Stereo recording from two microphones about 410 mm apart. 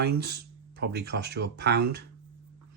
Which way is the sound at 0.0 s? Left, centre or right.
Right.